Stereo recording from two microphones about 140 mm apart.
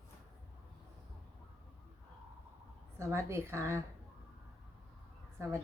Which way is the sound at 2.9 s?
20° right (ahead or behind).